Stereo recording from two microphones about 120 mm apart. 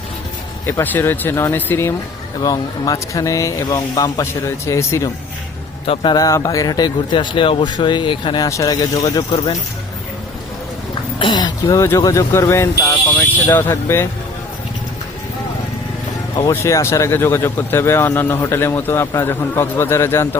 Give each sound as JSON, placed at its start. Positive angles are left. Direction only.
{"t": 0.7, "sound": "speech", "side_deg": 20}
{"t": 2.4, "sound": "speech", "side_deg": 30}
{"t": 5.8, "sound": "speech", "side_deg": 50}
{"t": 6.1, "sound": "speech", "side_deg": 30}
{"t": 8.4, "sound": "speech", "side_deg": 30}
{"t": 11.2, "sound": "speech", "side_deg": 35}
{"t": 16.5, "sound": "speech", "side_deg": 25}